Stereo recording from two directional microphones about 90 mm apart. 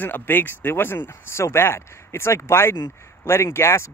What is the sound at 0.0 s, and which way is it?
Speech, 20° left (ahead or behind).